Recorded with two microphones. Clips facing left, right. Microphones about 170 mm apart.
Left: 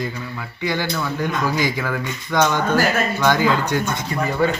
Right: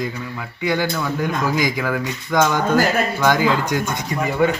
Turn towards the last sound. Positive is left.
turn(degrees=-10)  # may be behind; listen again after turning